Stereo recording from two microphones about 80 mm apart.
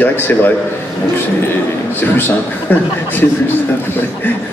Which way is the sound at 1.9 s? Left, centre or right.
Left.